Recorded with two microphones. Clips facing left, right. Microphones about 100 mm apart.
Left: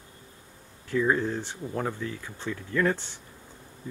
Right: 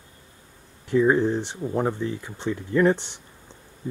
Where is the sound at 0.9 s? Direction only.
20° right (ahead or behind).